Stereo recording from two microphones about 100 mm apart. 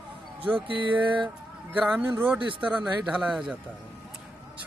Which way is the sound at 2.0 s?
20° right (ahead or behind).